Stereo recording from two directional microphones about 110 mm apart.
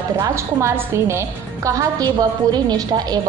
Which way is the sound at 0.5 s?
25° right (ahead or behind).